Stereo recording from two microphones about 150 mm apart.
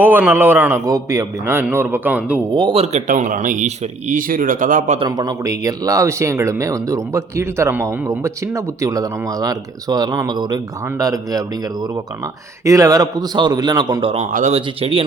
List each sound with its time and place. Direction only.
0.0 s a man's voice: 10° right (ahead or behind)
2.6 s speech: 35° right (ahead or behind)
3.1 s speech: 55° right (ahead or behind)
4.9 s speech: 25° right (ahead or behind)
14.5 s speech: 40° right (ahead or behind)